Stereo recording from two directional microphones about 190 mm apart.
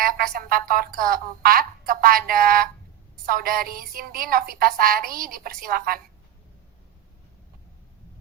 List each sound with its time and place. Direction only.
0.0 s a woman's voice: 50° right (ahead or behind)